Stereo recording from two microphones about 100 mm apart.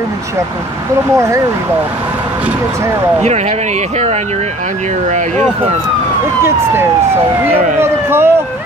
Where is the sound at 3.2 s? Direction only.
90° right.